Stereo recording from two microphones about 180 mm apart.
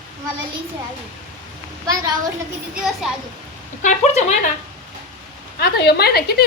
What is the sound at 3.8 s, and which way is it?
Speech, 40° left (ahead or behind).